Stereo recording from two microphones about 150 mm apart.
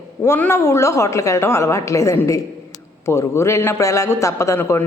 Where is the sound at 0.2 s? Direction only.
15° left (ahead or behind).